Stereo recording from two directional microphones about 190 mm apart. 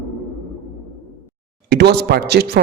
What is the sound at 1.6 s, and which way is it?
Speech, 60° right (ahead or behind).